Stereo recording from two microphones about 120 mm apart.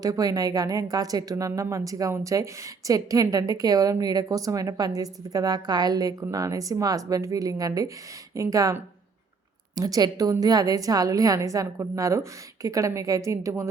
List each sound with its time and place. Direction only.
0.0 s a woman's voice: 30° right (ahead or behind)
9.7 s a woman's voice: 30° right (ahead or behind)